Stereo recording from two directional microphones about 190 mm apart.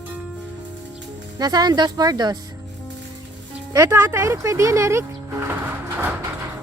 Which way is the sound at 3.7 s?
15° right (ahead or behind).